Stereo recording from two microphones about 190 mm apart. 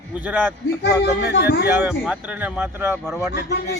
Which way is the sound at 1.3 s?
60° left (ahead or behind).